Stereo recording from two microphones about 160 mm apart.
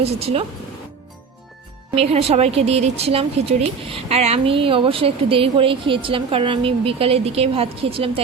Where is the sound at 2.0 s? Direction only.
40° right (ahead or behind).